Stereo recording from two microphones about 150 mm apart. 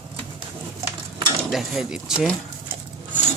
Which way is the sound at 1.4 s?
Centre (ahead or behind).